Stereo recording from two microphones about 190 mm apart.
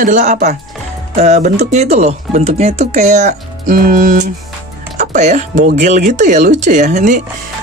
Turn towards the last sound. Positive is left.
turn(degrees=-40)  # may be behind; listen again after turning